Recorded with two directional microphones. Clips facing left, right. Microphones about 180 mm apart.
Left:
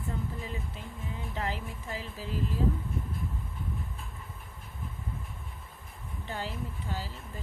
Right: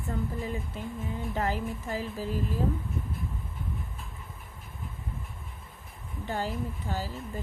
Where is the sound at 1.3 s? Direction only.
45° right (ahead or behind).